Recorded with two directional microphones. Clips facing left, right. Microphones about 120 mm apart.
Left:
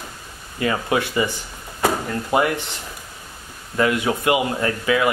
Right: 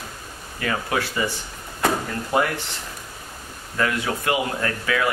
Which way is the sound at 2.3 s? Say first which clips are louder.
Left 3 dB; 20° left (ahead or behind).